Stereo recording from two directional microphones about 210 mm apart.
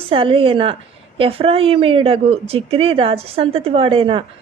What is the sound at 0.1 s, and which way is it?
A woman's voice, 25° right (ahead or behind).